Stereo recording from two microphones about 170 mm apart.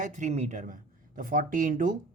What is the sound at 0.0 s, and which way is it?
Speech, 45° right (ahead or behind).